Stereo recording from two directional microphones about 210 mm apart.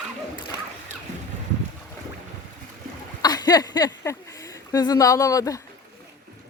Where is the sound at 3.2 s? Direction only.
20° left (ahead or behind).